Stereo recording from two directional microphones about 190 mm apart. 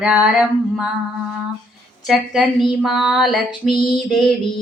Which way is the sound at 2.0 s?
Centre (ahead or behind).